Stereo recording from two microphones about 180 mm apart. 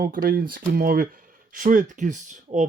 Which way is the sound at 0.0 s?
50° right (ahead or behind).